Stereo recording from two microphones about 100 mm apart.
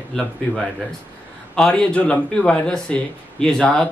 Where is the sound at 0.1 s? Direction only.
5° left (ahead or behind).